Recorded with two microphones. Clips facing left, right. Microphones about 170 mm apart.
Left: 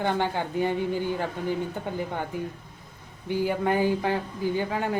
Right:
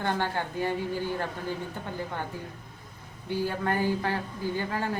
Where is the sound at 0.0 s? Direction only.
15° left (ahead or behind).